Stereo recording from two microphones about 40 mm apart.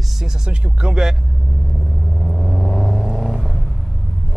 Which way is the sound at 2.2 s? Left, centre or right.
Centre.